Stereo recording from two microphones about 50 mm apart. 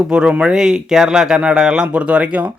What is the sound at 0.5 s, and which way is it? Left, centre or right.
Speech, centre.